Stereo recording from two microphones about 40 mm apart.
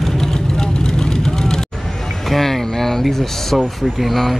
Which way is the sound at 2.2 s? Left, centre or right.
Centre.